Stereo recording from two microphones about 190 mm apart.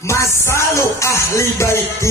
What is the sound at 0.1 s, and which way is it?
Music, 15° left (ahead or behind).